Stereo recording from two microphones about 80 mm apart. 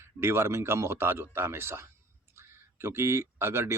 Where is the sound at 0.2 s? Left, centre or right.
Right.